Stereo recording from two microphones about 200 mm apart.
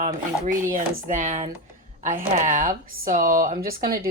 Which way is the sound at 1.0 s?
40° right (ahead or behind).